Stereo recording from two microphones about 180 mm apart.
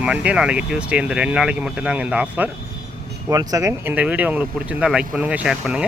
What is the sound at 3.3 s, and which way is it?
Speech, 20° right (ahead or behind).